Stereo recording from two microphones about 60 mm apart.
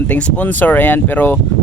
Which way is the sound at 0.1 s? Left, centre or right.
Left.